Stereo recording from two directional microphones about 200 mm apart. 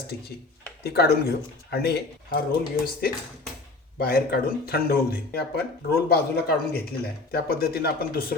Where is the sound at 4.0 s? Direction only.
50° left (ahead or behind).